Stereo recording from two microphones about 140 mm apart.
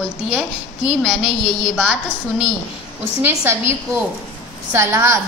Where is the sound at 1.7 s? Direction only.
5° right (ahead or behind).